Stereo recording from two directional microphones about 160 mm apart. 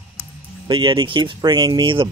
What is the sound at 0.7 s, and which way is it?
Speech, 25° right (ahead or behind).